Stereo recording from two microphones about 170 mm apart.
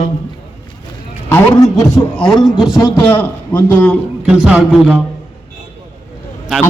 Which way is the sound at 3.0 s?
10° left (ahead or behind).